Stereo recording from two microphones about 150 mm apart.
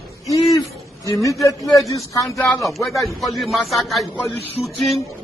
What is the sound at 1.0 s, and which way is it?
A man's voice, 20° left (ahead or behind).